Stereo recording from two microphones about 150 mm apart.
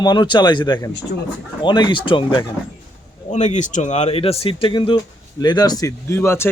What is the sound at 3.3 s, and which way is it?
Speech, 50° left (ahead or behind).